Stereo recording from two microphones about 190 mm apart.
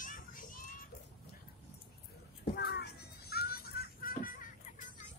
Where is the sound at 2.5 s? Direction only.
60° left (ahead or behind).